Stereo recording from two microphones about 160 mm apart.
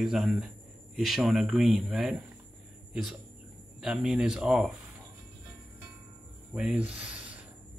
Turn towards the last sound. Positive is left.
turn(degrees=-5)  # may be behind; listen again after turning